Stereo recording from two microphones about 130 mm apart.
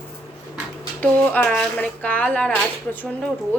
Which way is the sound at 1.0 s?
10° left (ahead or behind).